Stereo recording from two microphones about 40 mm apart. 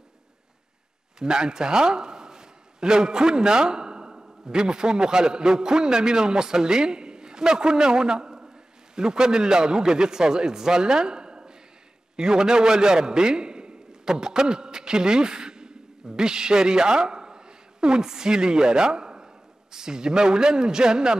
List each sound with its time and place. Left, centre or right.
1.2 s a man's voice: centre